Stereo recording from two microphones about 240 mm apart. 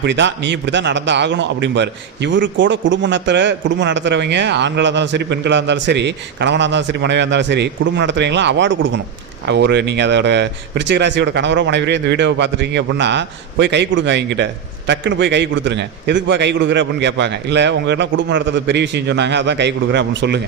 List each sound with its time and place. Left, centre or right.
0.0 s a man's voice: right